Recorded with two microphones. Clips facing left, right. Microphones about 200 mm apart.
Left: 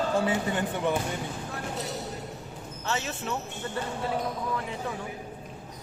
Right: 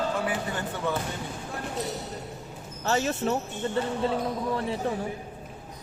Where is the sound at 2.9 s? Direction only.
40° right (ahead or behind).